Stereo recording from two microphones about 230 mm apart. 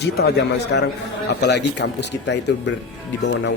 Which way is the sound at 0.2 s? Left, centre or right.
Left.